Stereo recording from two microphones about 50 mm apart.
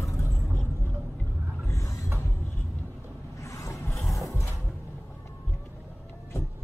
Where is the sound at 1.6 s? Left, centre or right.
Left.